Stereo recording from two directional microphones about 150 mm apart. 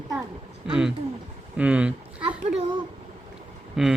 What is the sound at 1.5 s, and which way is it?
Speech, 10° right (ahead or behind).